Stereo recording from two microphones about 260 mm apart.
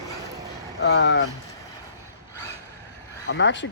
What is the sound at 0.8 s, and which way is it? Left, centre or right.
Speech, left.